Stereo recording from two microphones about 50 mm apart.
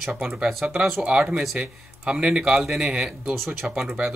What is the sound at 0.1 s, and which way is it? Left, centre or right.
Speech, centre.